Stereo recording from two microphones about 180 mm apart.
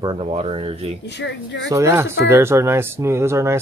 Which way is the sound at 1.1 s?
75° left (ahead or behind).